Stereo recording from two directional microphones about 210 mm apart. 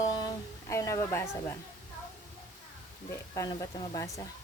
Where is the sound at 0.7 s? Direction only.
15° left (ahead or behind).